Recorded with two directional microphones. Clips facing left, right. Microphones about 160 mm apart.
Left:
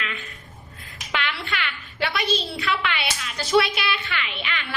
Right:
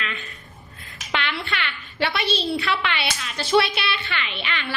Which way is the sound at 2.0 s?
30° right (ahead or behind).